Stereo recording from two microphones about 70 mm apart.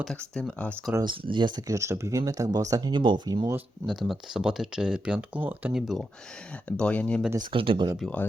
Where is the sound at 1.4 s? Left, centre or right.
Right.